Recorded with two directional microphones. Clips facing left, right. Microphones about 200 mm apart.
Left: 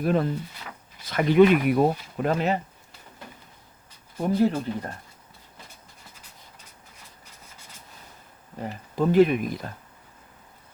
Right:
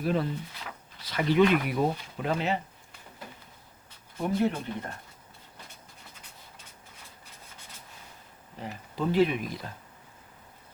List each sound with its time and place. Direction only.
0.0 s speech: 50° left (ahead or behind)
4.3 s speech: 35° left (ahead or behind)
8.5 s speech: 45° left (ahead or behind)